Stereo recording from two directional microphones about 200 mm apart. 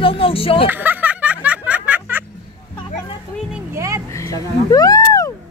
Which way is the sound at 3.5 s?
15° right (ahead or behind).